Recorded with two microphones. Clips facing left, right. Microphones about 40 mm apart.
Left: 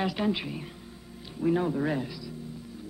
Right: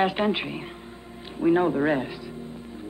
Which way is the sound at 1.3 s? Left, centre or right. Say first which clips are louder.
Right 6 dB; right.